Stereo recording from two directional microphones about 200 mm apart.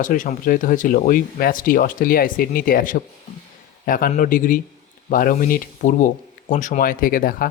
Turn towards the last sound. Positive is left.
turn(degrees=45)  # may be behind; listen again after turning